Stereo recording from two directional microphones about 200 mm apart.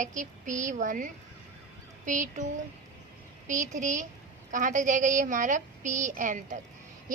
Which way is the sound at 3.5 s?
40° right (ahead or behind).